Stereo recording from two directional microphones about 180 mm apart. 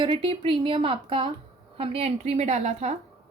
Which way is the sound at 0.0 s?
30° right (ahead or behind).